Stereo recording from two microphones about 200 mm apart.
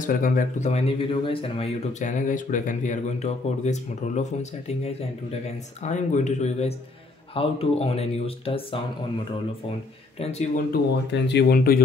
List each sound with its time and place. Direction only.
0.0 s speech: 45° left (ahead or behind); by 8.8 s 30° left (ahead or behind)
10.7 s speech: 60° left (ahead or behind)